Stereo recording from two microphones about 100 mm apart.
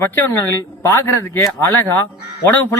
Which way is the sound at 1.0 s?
30° left (ahead or behind).